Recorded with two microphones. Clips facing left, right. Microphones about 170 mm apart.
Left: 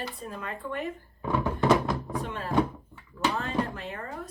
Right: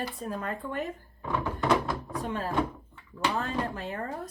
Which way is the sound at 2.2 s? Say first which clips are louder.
Right 3 dB; 40° right (ahead or behind).